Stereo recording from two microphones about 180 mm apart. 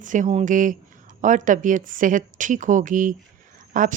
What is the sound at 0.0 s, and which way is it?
Speech, 45° right (ahead or behind).